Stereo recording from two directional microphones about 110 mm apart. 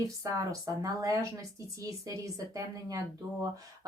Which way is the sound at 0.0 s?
30° right (ahead or behind).